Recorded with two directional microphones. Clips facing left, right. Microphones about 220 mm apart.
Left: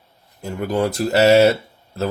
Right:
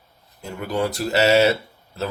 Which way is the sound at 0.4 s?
45° left (ahead or behind).